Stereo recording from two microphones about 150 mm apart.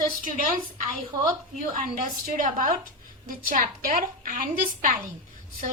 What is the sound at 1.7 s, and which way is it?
A woman's voice, 60° right (ahead or behind).